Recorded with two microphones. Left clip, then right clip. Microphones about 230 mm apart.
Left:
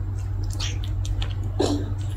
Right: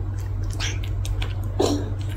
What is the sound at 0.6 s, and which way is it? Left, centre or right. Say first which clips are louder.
Chewing: right 3 dB; centre.